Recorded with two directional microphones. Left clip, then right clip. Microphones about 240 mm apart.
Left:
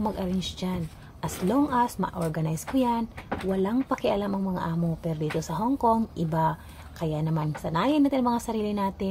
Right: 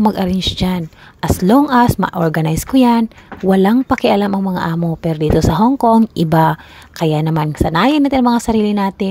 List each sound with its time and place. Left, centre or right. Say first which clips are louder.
0.0 s a woman's voice: right 14 dB; right